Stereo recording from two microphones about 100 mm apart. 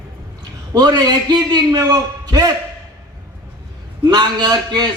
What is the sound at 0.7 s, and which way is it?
A man's voice, 45° right (ahead or behind).